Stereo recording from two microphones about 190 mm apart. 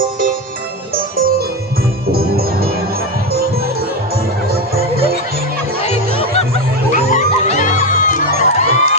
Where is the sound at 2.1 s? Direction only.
50° right (ahead or behind).